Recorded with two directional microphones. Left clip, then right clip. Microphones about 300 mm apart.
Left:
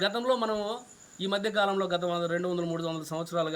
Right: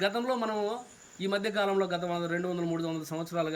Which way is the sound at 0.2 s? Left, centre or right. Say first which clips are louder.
Left 2 dB; centre.